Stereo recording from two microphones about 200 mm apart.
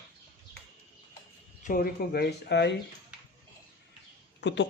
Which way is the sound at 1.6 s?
45° left (ahead or behind).